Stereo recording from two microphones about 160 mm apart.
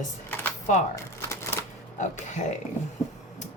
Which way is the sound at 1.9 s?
50° left (ahead or behind).